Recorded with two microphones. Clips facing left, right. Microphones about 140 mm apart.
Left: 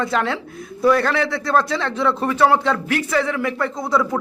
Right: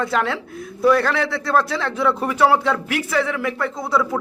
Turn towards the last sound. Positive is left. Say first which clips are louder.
# left 1 dB
turn(degrees=-5)  # may be behind; listen again after turning